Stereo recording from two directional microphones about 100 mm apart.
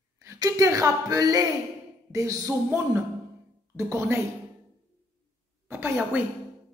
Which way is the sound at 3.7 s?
30° right (ahead or behind).